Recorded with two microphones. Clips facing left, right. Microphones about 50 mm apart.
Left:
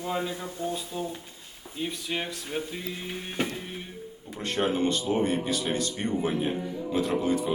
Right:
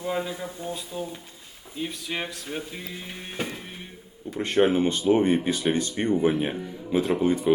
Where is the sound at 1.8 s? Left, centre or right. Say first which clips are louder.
Right 1 dB; centre.